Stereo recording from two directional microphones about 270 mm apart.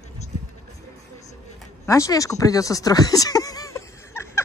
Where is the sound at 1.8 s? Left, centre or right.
Centre.